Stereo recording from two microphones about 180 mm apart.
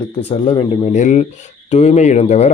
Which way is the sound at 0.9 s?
45° left (ahead or behind).